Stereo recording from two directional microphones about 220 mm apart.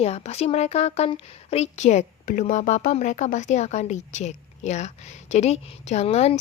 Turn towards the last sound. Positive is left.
turn(degrees=30)  # may be behind; listen again after turning